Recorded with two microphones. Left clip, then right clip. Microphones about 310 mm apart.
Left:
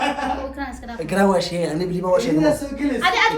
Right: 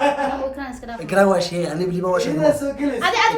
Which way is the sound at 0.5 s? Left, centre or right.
Centre.